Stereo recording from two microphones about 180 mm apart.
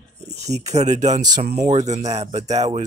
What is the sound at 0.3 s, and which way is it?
Speech, 40° right (ahead or behind).